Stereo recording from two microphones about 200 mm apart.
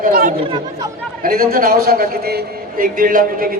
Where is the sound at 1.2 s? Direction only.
45° right (ahead or behind).